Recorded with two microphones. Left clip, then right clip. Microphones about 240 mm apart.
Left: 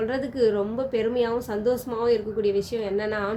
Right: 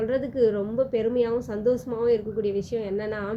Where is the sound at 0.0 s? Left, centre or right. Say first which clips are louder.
Even; centre.